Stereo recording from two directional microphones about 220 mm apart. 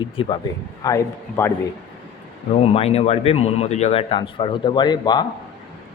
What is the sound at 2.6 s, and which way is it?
Speech, 25° left (ahead or behind).